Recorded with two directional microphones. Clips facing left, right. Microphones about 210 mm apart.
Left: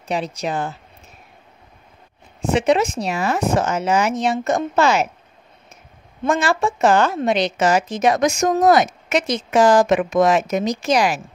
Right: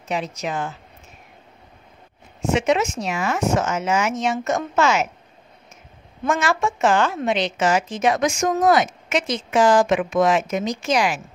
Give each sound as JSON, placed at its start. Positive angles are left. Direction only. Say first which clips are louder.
{"t": 0.1, "sound": "a woman's voice", "louder": "left 3 dB", "side_deg": 35}
{"t": 2.4, "sound": "a woman's voice", "louder": "left 2 dB", "side_deg": 35}
{"t": 6.2, "sound": "a woman's voice", "louder": "left 2 dB", "side_deg": 35}